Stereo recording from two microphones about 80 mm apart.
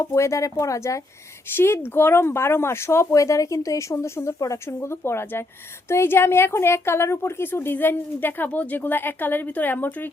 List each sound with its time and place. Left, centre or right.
0.0 s speech: left
1.5 s a woman's voice: left